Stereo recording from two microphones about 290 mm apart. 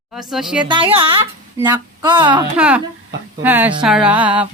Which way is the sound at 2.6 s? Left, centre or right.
Centre.